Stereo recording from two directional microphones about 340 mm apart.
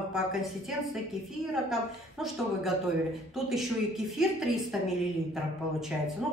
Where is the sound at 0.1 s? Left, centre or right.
Centre.